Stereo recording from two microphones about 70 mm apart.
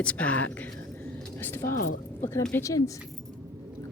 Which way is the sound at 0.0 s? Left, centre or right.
Centre.